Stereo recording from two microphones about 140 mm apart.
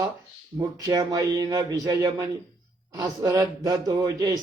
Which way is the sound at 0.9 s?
25° right (ahead or behind).